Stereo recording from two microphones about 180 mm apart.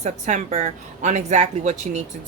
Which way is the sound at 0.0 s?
40° right (ahead or behind).